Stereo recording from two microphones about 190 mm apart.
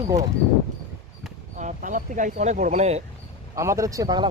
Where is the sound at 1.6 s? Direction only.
40° right (ahead or behind).